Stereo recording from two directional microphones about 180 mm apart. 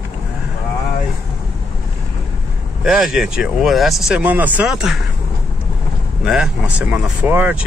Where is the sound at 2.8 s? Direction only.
Centre (ahead or behind).